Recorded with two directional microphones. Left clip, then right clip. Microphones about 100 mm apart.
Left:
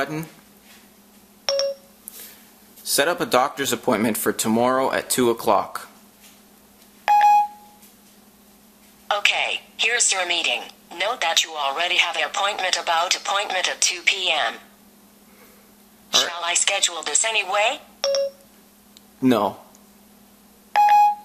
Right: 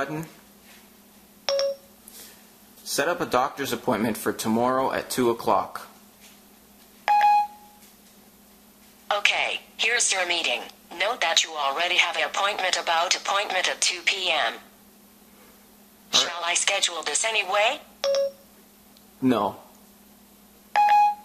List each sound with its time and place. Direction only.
1.4 s a sound: centre (ahead or behind)
2.9 s speech: 30° left (ahead or behind)
7.1 s beep: centre (ahead or behind)
9.0 s a woman's voice: centre (ahead or behind)
16.1 s a woman's voice: centre (ahead or behind)
19.2 s speech: 30° left (ahead or behind)
20.7 s beep: centre (ahead or behind)